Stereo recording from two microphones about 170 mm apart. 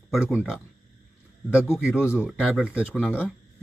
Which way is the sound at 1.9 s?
15° left (ahead or behind).